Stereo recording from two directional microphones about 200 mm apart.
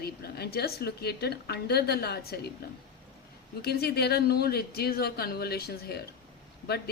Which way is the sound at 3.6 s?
55° left (ahead or behind).